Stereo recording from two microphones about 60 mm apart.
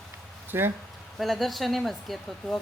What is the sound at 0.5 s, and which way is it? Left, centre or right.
Speech, right.